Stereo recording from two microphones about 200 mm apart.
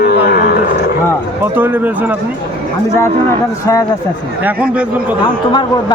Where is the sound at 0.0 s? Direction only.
50° left (ahead or behind).